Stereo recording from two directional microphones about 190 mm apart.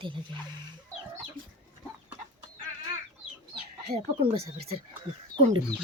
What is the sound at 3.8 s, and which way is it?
Speech, 35° right (ahead or behind).